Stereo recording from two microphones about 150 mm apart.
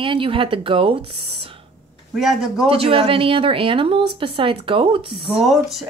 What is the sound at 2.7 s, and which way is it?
A woman's voice, 40° right (ahead or behind).